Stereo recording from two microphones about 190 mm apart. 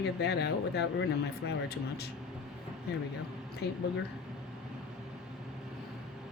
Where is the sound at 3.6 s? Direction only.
60° left (ahead or behind).